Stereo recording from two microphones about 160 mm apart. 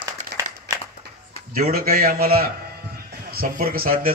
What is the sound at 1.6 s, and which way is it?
A man's voice, 65° right (ahead or behind).